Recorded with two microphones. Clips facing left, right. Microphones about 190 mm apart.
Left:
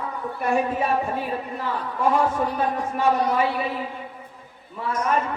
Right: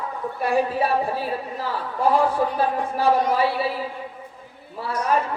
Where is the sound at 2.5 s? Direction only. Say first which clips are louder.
Right 2 dB; 35° right (ahead or behind).